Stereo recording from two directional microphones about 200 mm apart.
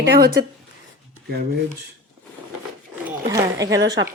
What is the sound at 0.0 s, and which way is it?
Speech, 50° right (ahead or behind).